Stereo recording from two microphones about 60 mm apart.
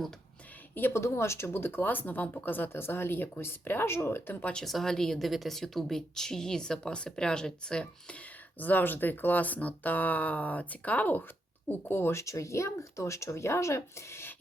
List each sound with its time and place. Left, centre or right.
0.7 s a woman's voice: left
0.9 s speech: left
4.6 s speech: centre
8.5 s speech: left
12.2 s speech: left